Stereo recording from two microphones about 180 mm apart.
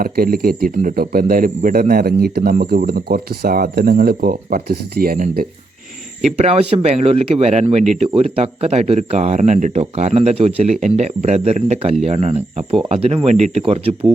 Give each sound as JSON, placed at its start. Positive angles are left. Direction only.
{"t": 0.0, "sound": "speech", "side_deg": -55}
{"t": 6.2, "sound": "speech", "side_deg": -35}